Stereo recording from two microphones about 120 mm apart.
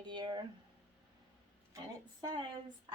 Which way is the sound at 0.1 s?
40° right (ahead or behind).